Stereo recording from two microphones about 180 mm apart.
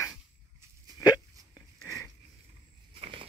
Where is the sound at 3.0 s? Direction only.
30° right (ahead or behind).